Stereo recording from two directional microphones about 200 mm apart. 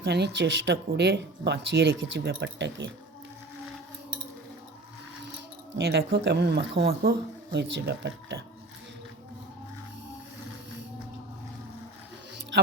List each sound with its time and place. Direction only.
0.0 s speech: 55° right (ahead or behind)
5.7 s speech: 55° right (ahead or behind)